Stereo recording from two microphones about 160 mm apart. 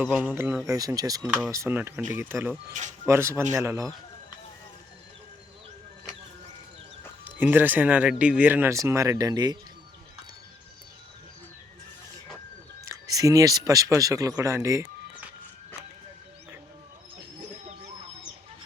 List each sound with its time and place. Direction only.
0.0 s speech: 10° right (ahead or behind)
7.3 s speech: 10° right (ahead or behind)
12.9 s speech: 20° right (ahead or behind)